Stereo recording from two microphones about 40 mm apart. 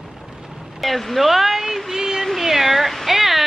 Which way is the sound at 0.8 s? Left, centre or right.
Centre.